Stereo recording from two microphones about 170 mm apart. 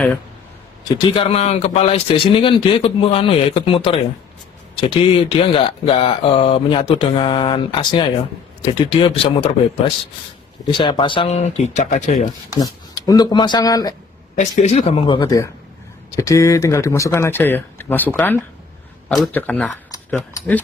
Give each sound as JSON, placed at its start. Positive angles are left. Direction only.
{"t": 0.9, "sound": "speech", "side_deg": 30}
{"t": 5.3, "sound": "speech", "side_deg": 30}
{"t": 12.5, "sound": "speech", "side_deg": 20}
{"t": 14.6, "sound": "speech", "side_deg": 40}